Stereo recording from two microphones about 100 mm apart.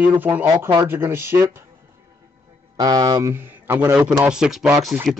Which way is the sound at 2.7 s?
40° right (ahead or behind).